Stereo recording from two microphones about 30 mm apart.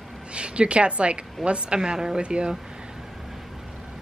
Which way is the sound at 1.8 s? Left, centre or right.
Right.